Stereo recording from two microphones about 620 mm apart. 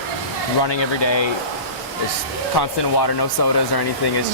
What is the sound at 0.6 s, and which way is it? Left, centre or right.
Speech, left.